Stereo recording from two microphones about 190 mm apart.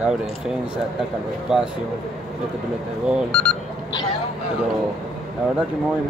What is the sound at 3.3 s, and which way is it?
Speech, 5° left (ahead or behind).